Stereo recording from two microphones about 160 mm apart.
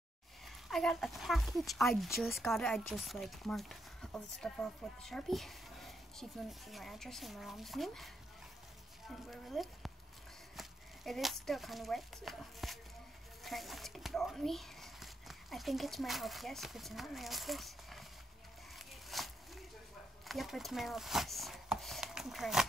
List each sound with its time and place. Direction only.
0.7 s speech: centre (ahead or behind)
9.3 s speech: centre (ahead or behind)
19.0 s a sound: centre (ahead or behind)
20.2 s speech: centre (ahead or behind)